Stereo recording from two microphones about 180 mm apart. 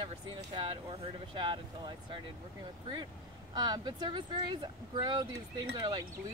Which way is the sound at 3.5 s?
25° right (ahead or behind).